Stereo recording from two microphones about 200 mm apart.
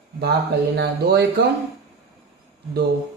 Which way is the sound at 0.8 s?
55° right (ahead or behind).